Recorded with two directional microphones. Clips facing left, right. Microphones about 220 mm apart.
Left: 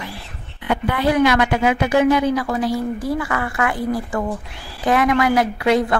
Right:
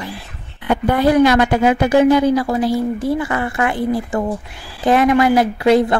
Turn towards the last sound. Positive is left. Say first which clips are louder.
# right 4 dB
turn(degrees=-30)  # may be behind; listen again after turning